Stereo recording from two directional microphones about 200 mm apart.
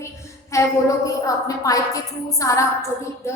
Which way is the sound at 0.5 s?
15° left (ahead or behind).